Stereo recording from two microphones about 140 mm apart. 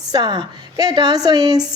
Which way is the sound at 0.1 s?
30° right (ahead or behind).